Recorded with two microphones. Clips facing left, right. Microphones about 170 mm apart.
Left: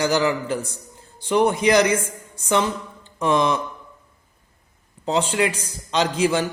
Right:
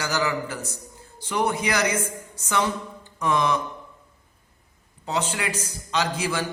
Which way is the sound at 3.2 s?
30° left (ahead or behind).